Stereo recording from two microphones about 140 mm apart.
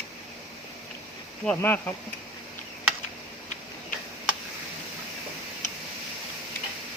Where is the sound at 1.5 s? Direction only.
15° left (ahead or behind).